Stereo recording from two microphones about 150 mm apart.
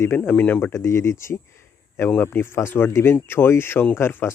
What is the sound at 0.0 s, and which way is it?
Speech, 15° left (ahead or behind).